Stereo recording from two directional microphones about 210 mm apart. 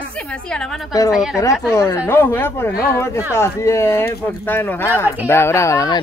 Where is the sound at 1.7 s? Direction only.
15° left (ahead or behind).